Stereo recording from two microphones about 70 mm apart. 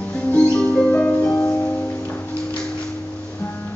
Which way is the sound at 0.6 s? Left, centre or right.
Left.